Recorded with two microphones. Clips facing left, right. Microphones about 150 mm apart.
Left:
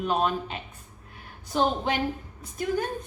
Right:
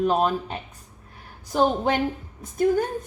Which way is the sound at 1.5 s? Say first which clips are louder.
Right 4 dB; 50° right (ahead or behind).